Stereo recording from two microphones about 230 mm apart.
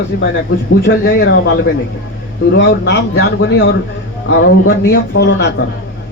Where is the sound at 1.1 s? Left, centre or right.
Left.